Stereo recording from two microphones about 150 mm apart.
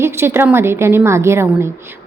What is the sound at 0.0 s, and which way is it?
A woman's voice, 15° right (ahead or behind).